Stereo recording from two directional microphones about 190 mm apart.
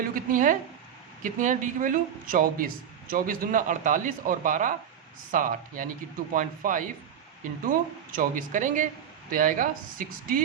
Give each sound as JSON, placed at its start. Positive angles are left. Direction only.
{"t": 0.1, "sound": "speech", "side_deg": -45}